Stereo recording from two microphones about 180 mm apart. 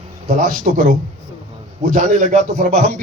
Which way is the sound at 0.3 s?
45° right (ahead or behind).